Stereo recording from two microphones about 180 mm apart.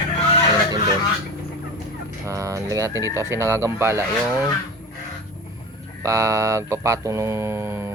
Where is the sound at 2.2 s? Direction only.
15° right (ahead or behind).